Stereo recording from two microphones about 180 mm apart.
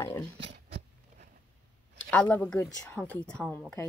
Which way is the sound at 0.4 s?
75° right (ahead or behind).